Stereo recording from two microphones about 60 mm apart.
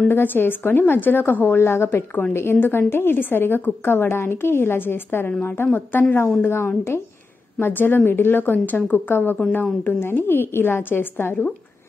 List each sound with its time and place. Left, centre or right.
0.1 s a woman's voice: left